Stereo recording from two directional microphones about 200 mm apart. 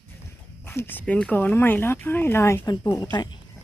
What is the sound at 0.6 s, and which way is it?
Speech, 10° left (ahead or behind).